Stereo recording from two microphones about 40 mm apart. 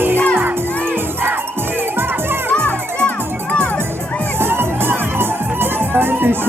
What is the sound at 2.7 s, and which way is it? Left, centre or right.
Music, left.